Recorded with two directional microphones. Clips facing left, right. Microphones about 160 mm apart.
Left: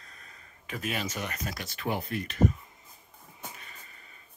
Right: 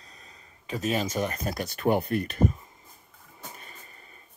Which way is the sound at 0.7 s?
35° right (ahead or behind).